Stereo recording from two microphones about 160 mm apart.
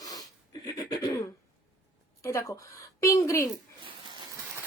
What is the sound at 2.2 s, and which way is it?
Speech, 20° left (ahead or behind).